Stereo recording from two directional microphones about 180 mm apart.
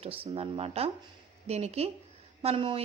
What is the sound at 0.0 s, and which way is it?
A woman's voice, 30° right (ahead or behind).